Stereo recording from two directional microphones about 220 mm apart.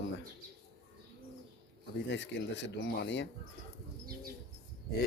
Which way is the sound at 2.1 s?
55° left (ahead or behind).